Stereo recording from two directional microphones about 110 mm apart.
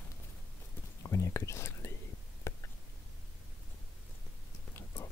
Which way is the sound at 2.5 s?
25° left (ahead or behind).